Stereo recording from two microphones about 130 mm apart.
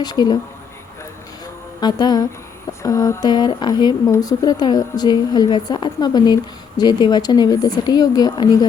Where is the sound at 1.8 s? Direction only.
30° left (ahead or behind).